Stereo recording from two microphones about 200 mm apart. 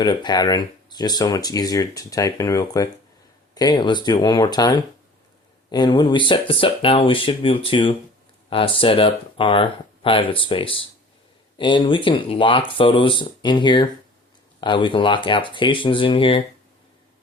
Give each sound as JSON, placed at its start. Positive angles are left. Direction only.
{"t": 0.0, "sound": "speech", "side_deg": 20}